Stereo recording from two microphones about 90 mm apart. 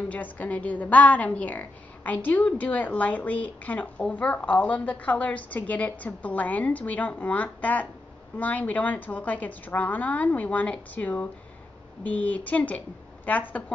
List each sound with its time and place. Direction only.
0.1 s a woman's voice: 15° left (ahead or behind)